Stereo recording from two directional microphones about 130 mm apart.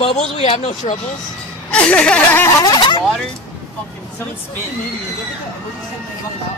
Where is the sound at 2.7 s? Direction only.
40° left (ahead or behind).